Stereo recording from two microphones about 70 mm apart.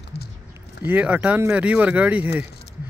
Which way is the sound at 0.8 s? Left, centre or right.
Right.